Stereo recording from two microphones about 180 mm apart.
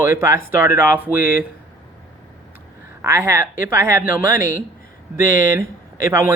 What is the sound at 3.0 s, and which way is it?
Speech, 15° right (ahead or behind).